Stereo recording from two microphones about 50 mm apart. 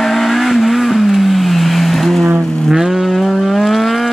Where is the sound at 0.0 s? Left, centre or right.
Centre.